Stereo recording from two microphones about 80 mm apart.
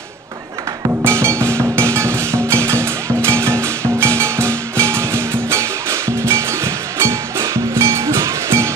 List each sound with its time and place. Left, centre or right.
1.0 s music: right